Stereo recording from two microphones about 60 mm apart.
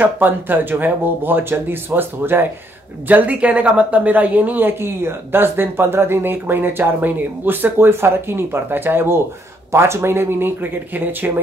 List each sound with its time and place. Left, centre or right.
0.0 s speech: right
9.7 s speech: right